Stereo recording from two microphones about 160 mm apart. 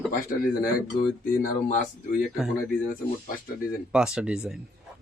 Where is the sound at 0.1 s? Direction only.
65° left (ahead or behind).